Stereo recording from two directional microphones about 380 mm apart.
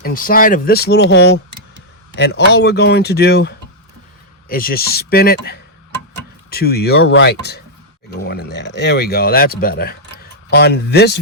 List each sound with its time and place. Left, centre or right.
0.0 s speech: left
6.5 s speech: left